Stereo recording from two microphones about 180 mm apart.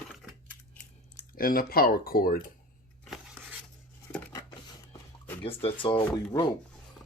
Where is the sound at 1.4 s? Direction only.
55° left (ahead or behind).